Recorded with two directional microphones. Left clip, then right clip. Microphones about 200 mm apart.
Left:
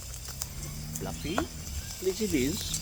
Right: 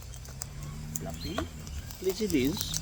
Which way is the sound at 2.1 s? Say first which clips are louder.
Right 2 dB; 15° right (ahead or behind).